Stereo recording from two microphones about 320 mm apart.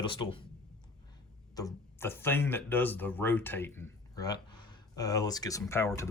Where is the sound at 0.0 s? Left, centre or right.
Centre.